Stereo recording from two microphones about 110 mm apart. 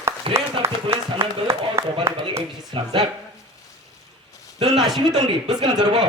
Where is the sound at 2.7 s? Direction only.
45° right (ahead or behind).